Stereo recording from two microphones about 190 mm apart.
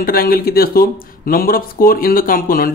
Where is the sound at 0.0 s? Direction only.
50° left (ahead or behind).